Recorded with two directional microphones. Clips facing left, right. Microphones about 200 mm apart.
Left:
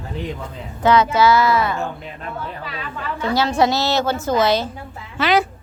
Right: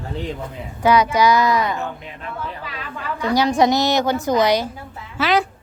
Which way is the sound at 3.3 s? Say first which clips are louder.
Right 2 dB; 15° right (ahead or behind).